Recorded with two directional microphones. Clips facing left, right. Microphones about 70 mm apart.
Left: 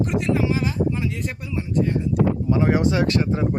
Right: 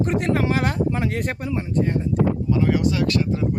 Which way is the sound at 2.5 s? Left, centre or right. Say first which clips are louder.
Left 2 dB; left.